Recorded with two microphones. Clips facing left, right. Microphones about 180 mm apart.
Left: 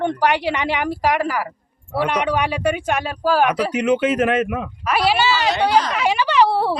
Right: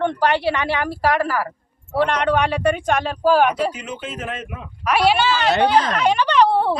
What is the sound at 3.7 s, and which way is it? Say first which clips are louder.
A man's voice: left 12 dB; 75° left (ahead or behind).